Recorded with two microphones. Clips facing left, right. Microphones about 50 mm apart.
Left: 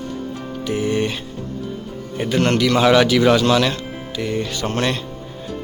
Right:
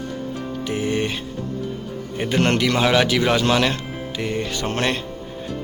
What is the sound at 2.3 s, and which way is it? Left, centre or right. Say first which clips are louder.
Speech: left 2 dB; right.